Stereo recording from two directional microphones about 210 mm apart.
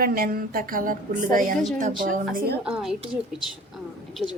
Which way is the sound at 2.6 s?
Centre (ahead or behind).